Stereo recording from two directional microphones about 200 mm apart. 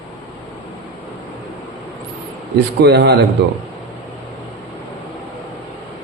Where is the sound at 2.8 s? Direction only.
55° right (ahead or behind).